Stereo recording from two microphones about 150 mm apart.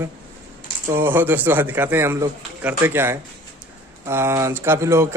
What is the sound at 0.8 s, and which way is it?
Speech, 15° right (ahead or behind).